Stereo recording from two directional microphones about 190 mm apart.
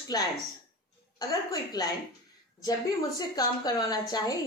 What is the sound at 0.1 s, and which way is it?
A woman's voice, 20° left (ahead or behind).